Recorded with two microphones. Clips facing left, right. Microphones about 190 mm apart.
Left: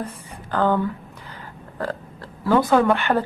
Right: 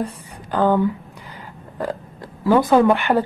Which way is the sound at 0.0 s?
10° right (ahead or behind).